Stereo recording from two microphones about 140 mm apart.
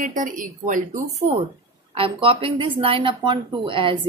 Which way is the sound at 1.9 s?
40° right (ahead or behind).